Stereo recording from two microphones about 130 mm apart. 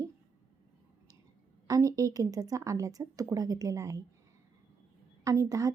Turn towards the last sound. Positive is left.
turn(degrees=-25)  # may be behind; listen again after turning